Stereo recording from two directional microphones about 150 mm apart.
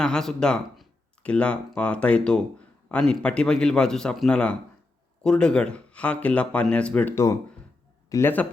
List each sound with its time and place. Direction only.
0.0 s a man's voice: 5° left (ahead or behind)
8.1 s speech: 15° left (ahead or behind)